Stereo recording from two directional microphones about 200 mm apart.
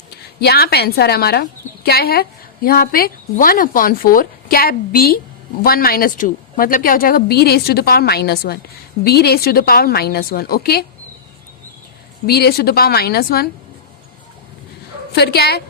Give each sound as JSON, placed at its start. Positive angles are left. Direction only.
{"t": 0.2, "sound": "a woman's voice", "side_deg": 50}
{"t": 12.2, "sound": "a woman's voice", "side_deg": 50}
{"t": 15.1, "sound": "a woman's voice", "side_deg": 55}